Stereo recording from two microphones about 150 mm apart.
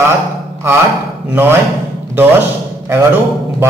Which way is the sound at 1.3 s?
15° right (ahead or behind).